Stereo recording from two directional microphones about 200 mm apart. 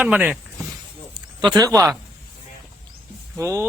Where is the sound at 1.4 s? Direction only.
20° right (ahead or behind).